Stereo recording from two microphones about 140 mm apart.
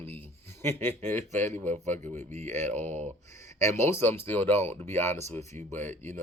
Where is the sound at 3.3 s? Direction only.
20° left (ahead or behind).